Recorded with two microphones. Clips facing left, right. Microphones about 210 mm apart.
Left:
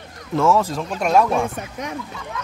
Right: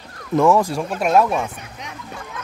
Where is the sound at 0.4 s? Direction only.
15° right (ahead or behind).